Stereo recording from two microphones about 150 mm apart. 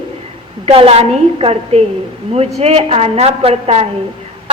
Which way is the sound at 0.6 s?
40° right (ahead or behind).